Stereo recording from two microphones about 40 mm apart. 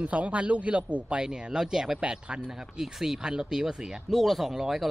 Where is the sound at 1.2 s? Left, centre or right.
Centre.